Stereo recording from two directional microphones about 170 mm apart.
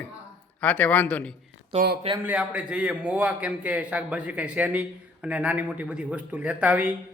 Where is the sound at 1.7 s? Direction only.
35° right (ahead or behind).